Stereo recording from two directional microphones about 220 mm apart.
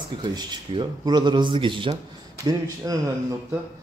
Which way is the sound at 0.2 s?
20° right (ahead or behind).